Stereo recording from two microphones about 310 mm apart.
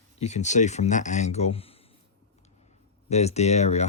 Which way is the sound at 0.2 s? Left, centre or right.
Left.